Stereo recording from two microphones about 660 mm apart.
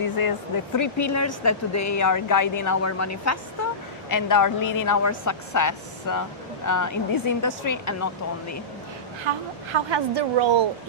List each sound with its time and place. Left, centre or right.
0.0 s speech: left
9.3 s a woman's voice: right